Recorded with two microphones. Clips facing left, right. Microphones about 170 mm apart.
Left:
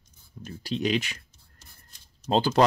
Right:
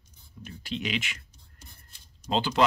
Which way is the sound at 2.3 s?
40° left (ahead or behind).